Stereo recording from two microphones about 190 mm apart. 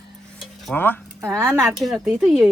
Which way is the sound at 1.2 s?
15° right (ahead or behind).